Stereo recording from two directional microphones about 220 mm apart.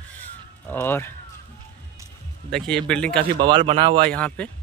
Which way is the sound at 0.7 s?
10° left (ahead or behind).